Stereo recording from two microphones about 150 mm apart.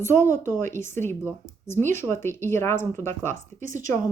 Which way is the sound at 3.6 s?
60° right (ahead or behind).